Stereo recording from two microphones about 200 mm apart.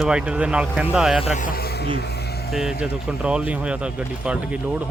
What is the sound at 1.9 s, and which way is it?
Electric shaver, 55° left (ahead or behind).